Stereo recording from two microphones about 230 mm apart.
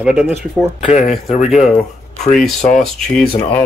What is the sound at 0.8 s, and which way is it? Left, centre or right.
Speech, left.